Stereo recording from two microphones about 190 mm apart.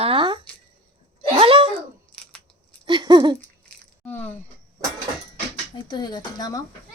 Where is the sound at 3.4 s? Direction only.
10° left (ahead or behind).